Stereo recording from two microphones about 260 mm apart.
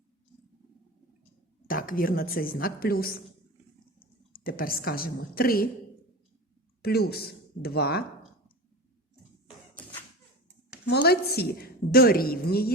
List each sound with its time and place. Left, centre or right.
1.6 s a woman's voice: left
4.3 s a woman's voice: left
6.8 s a woman's voice: left
10.8 s a woman's voice: left